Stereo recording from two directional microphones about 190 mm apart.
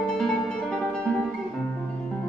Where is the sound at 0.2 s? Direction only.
5° left (ahead or behind).